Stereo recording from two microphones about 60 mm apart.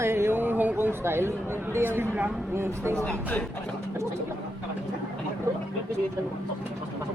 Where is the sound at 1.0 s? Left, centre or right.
Right.